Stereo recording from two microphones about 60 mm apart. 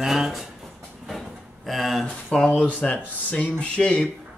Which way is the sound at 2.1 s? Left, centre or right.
Centre.